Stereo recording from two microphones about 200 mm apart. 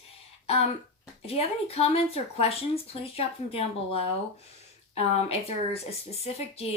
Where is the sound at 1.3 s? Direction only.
30° left (ahead or behind).